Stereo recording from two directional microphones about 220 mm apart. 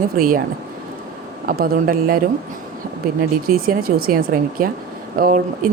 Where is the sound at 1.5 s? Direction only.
40° right (ahead or behind).